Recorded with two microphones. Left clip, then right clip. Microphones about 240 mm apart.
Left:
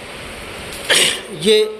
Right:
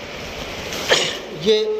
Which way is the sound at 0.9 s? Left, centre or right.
Left.